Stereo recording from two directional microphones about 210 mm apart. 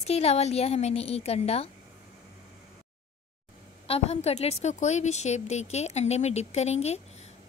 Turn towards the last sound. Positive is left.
turn(degrees=30)  # may be behind; listen again after turning